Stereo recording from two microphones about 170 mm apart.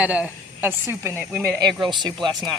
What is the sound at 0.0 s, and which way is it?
Speech, 10° right (ahead or behind).